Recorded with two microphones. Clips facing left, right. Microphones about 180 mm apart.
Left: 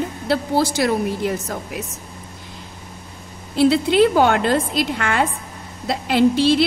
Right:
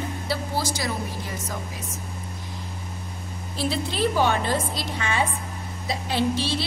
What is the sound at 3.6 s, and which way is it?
A woman's voice, 65° left (ahead or behind).